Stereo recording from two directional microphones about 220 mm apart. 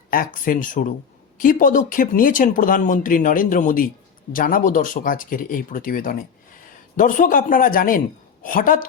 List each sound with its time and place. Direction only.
0.4 s speech: 35° left (ahead or behind)